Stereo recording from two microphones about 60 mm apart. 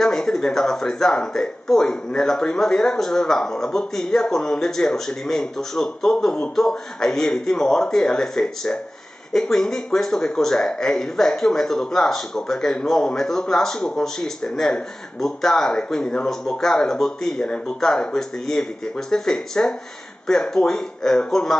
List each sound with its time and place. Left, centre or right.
0.0 s speech: centre
6.1 s a sound: centre
6.5 s speech: centre